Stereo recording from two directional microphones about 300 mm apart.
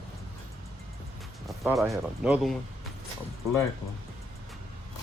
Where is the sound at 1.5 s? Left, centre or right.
Centre.